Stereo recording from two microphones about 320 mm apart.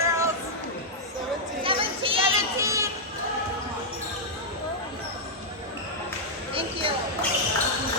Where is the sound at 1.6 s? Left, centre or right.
Centre.